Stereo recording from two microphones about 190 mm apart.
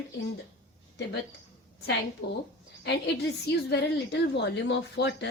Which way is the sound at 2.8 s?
65° left (ahead or behind).